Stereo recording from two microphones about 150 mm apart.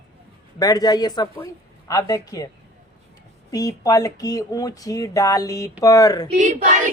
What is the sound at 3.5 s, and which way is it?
Speech, 25° left (ahead or behind).